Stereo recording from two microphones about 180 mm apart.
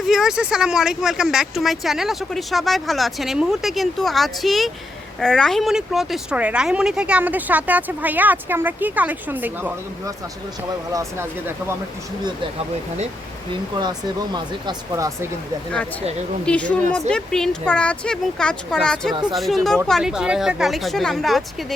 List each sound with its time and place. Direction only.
0.1 s speech: 5° right (ahead or behind)
10.9 s speech: 15° right (ahead or behind)
14.3 s speech: 20° right (ahead or behind)
16.5 s a woman's voice: 5° left (ahead or behind)